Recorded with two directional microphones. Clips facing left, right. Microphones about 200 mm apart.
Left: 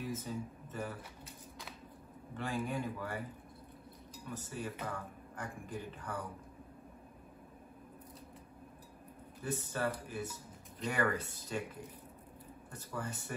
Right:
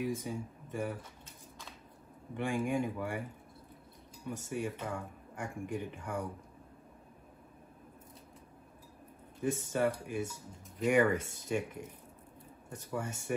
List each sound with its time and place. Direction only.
0.0 s speech: 15° right (ahead or behind)
2.3 s speech: 20° right (ahead or behind)
4.5 s speech: 25° right (ahead or behind)
9.4 s speech: 20° right (ahead or behind)
12.7 s speech: 25° right (ahead or behind)